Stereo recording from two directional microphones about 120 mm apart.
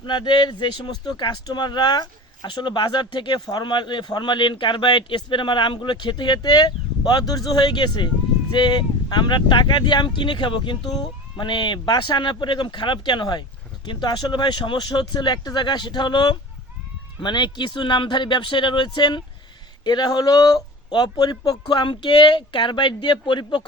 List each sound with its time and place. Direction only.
0.0 s speech: 40° left (ahead or behind)